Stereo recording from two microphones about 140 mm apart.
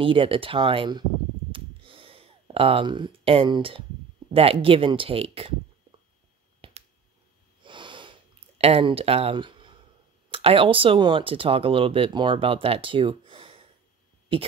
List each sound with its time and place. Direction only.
0.0 s speech: 40° right (ahead or behind)
1.5 s a sound: 40° right (ahead or behind)
4.3 s speech: 40° right (ahead or behind)
6.6 s finger snapping: 40° right (ahead or behind)
7.6 s sniff: 35° right (ahead or behind)
10.3 s speech: 40° right (ahead or behind)